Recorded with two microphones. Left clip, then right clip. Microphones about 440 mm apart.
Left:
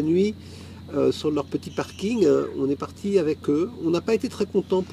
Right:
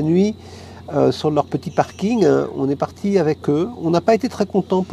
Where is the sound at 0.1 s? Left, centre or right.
Right.